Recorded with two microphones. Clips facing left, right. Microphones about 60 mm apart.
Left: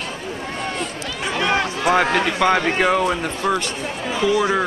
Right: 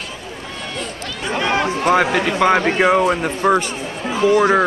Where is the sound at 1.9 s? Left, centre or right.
Centre.